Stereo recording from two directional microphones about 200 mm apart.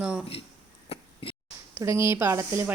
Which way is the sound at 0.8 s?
25° left (ahead or behind).